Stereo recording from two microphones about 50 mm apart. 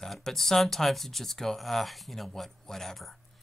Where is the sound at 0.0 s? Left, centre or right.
Centre.